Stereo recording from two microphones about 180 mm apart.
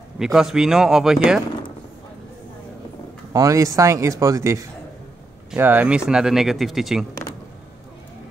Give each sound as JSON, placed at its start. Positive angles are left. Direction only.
{"t": 0.2, "sound": "speech", "side_deg": 0}
{"t": 3.3, "sound": "speech", "side_deg": -20}